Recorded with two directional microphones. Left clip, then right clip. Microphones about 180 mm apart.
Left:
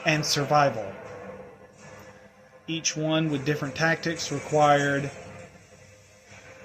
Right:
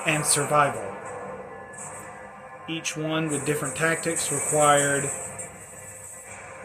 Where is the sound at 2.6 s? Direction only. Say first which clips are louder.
Left 2 dB; 55° left (ahead or behind).